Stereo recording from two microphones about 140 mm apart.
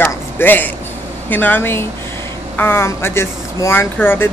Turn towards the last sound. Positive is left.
turn(degrees=15)  # may be behind; listen again after turning